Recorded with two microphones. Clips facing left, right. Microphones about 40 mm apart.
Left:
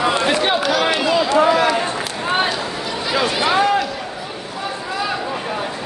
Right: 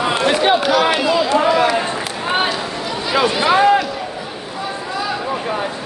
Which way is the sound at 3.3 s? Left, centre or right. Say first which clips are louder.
Right 4 dB; centre.